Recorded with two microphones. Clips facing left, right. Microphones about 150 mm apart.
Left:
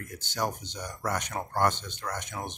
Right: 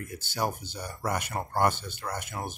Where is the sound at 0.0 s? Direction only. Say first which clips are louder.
Right 1 dB; 10° right (ahead or behind).